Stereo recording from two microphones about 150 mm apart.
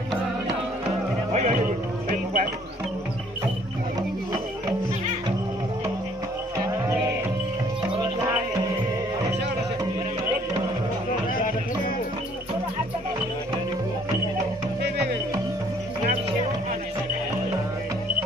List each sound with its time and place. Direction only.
1.3 s music: 50° right (ahead or behind)